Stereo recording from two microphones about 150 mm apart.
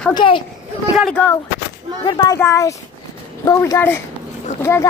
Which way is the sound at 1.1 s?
10° left (ahead or behind).